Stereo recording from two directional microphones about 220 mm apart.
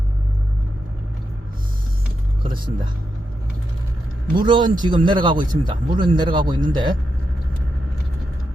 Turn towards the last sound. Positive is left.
turn(degrees=-20)  # may be behind; listen again after turning